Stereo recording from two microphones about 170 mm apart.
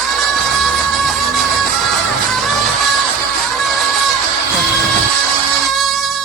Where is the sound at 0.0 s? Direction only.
Centre (ahead or behind).